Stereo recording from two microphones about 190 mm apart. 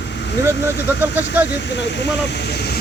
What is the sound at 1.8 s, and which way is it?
Speech, 65° left (ahead or behind).